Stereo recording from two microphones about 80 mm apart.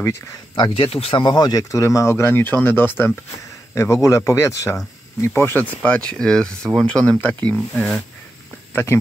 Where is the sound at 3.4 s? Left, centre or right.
Left.